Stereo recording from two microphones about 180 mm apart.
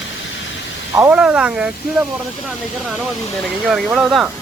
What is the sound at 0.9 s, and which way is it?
Speech, 10° right (ahead or behind).